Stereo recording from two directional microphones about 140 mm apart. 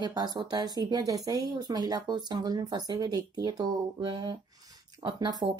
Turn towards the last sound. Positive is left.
turn(degrees=-30)  # may be behind; listen again after turning